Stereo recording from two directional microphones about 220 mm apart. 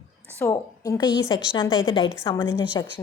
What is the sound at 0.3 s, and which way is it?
A woman's voice, 15° left (ahead or behind).